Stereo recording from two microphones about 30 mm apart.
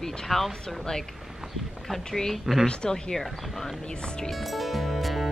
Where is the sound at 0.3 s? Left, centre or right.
Centre.